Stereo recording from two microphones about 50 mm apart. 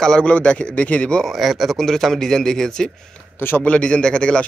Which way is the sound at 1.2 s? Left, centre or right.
Centre.